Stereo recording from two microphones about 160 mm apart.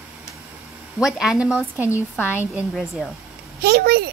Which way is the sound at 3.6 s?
80° right.